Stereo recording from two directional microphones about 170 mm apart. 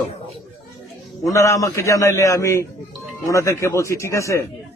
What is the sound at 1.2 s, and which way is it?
A man's voice, 15° left (ahead or behind).